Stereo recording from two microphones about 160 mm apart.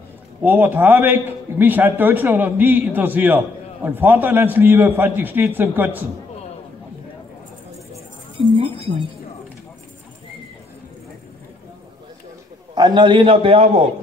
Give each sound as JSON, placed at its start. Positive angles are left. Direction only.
{"t": 0.4, "sound": "a man's voice", "side_deg": -10}
{"t": 8.4, "sound": "speech", "side_deg": -35}
{"t": 12.7, "sound": "a man's voice", "side_deg": -30}